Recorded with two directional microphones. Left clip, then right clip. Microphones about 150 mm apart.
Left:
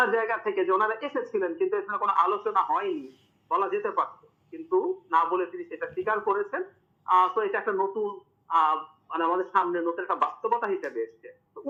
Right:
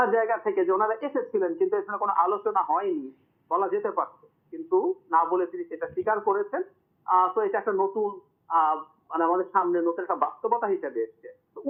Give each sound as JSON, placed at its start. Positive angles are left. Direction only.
{"t": 0.0, "sound": "speech", "side_deg": 20}